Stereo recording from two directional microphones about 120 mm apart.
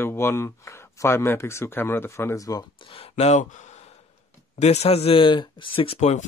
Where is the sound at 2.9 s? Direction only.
60° left (ahead or behind); by 3.7 s 85° left.